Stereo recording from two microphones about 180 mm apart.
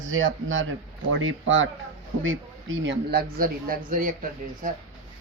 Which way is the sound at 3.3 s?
55° right (ahead or behind).